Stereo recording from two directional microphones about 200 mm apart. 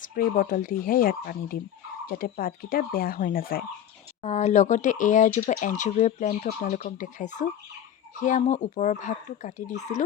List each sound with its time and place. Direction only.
0.2 s speech: 45° left (ahead or behind)
4.2 s speech: 35° left (ahead or behind)